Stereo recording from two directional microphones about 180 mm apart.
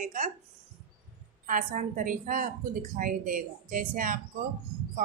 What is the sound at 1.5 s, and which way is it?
A woman's voice, 45° right (ahead or behind).